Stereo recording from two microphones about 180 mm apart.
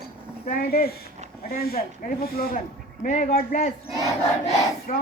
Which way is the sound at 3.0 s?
40° left (ahead or behind).